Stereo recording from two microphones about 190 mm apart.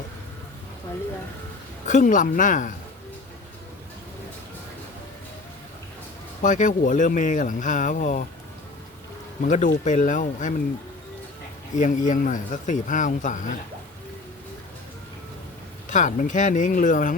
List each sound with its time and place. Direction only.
1.9 s speech: 40° left (ahead or behind)
6.4 s speech: 40° left (ahead or behind)
9.4 s speech: 40° left (ahead or behind)
11.8 s speech: 40° left (ahead or behind)
15.9 s speech: 40° left (ahead or behind)